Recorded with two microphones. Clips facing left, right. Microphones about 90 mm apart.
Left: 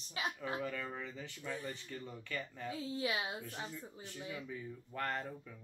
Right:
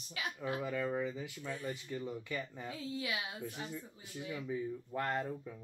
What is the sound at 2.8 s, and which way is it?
Speech, 30° left (ahead or behind).